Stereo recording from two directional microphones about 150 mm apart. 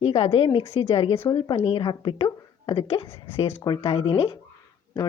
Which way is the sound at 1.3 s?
25° left (ahead or behind).